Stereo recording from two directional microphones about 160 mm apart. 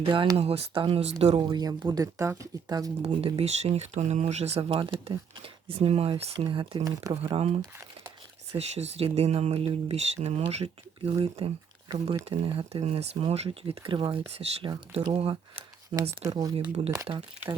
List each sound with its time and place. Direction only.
0.0 s speech: 35° right (ahead or behind)
3.0 s speech: 35° right (ahead or behind)
7.2 s speech: 40° right (ahead or behind)
16.2 s speech: 25° right (ahead or behind)